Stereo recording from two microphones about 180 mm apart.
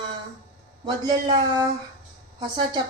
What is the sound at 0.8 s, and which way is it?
A woman's voice, 25° right (ahead or behind).